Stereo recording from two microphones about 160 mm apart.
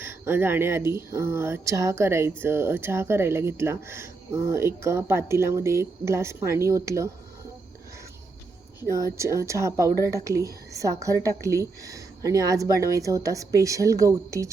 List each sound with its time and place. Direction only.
0.0 s speech: 15° right (ahead or behind)
9.1 s a woman's voice: 20° right (ahead or behind)